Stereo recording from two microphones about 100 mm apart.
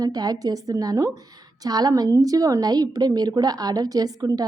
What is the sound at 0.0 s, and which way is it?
A woman's voice, 40° right (ahead or behind).